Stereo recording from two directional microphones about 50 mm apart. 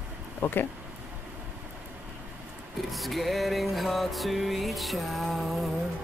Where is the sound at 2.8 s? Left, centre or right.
Centre.